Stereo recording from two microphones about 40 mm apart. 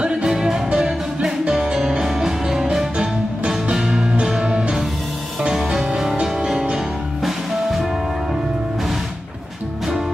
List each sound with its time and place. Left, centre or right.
0.0 s music: centre
7.2 s music: centre